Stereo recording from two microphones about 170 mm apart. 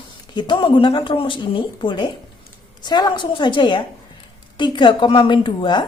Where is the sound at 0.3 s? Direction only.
25° left (ahead or behind).